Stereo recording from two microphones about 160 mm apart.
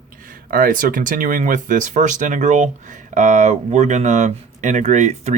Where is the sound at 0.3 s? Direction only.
60° right (ahead or behind).